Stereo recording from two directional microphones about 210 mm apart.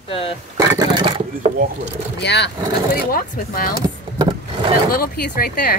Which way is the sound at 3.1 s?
40° left (ahead or behind).